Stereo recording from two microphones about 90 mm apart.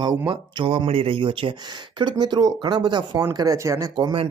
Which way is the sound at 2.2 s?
50° right (ahead or behind).